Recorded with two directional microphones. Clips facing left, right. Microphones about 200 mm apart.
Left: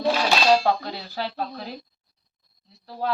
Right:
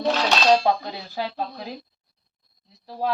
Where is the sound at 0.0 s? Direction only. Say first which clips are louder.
Even; 10° left (ahead or behind).